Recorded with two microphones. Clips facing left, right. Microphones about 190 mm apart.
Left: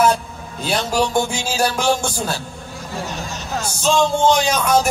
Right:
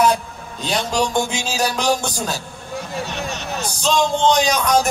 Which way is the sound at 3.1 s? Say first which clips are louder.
Right 1 dB; 65° right (ahead or behind).